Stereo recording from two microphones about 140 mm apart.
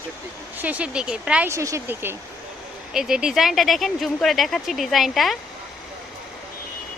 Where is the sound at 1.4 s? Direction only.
20° right (ahead or behind).